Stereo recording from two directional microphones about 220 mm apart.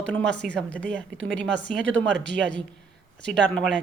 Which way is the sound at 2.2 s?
50° right (ahead or behind).